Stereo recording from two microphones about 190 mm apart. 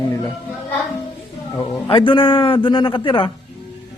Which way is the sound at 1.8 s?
25° left (ahead or behind).